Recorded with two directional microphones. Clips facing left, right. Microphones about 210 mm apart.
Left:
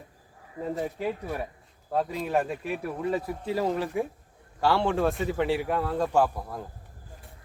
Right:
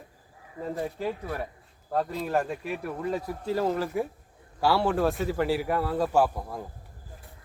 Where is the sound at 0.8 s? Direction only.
10° left (ahead or behind).